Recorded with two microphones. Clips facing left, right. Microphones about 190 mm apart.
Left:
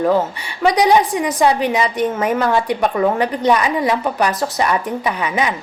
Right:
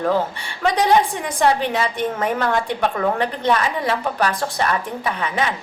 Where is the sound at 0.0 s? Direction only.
10° left (ahead or behind).